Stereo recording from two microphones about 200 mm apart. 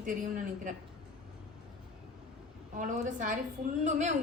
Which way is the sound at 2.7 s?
40° right (ahead or behind).